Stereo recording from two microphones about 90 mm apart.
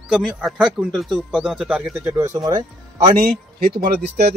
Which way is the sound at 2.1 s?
35° right (ahead or behind).